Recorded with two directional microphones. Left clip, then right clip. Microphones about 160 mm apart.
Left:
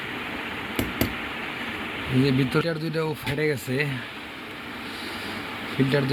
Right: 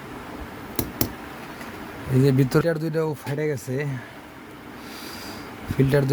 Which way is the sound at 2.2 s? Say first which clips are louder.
Right 3 dB; 55° right (ahead or behind).